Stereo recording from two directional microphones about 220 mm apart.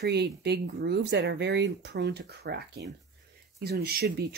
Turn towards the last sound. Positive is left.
turn(degrees=-45)  # may be behind; listen again after turning